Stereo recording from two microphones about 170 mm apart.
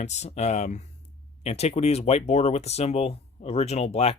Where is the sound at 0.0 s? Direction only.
40° left (ahead or behind).